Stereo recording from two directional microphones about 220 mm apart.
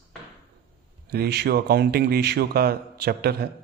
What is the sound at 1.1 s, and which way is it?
Speech, 45° right (ahead or behind).